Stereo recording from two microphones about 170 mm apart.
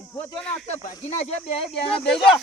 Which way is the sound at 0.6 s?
45° left (ahead or behind).